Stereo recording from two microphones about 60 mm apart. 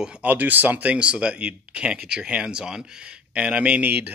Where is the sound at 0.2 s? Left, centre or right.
Right.